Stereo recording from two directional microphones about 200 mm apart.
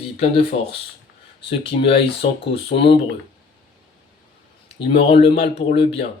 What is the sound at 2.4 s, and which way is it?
Speech, 30° left (ahead or behind).